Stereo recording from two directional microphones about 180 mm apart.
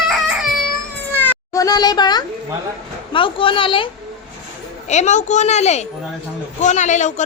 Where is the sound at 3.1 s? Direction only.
30° left (ahead or behind).